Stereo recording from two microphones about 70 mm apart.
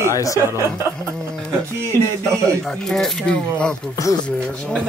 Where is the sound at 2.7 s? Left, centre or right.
Centre.